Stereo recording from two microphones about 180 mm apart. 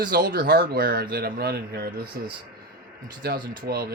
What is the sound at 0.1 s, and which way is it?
A man's voice, 55° right (ahead or behind).